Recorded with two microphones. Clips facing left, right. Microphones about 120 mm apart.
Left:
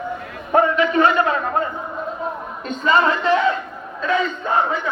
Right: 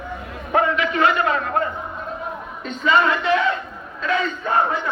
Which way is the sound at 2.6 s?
40° left (ahead or behind).